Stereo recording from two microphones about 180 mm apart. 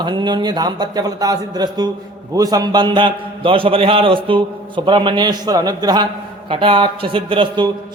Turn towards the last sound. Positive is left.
turn(degrees=-30)  # may be behind; listen again after turning